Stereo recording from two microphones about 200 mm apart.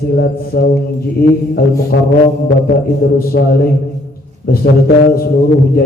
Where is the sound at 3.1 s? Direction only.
45° left (ahead or behind).